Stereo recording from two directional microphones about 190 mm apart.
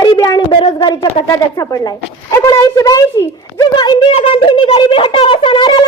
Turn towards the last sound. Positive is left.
turn(degrees=25)  # may be behind; listen again after turning